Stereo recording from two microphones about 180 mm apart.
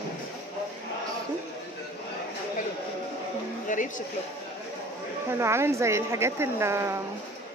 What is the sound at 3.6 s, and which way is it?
Speech, 45° left (ahead or behind).